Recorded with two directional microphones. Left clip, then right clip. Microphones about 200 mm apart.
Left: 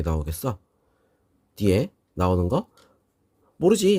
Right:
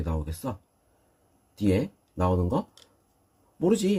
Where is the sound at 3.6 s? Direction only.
55° left (ahead or behind).